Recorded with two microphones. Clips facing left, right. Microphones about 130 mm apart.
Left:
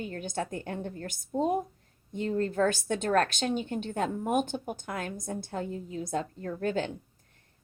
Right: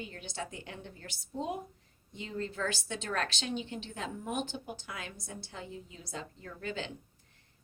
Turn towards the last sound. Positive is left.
turn(degrees=50)  # may be behind; listen again after turning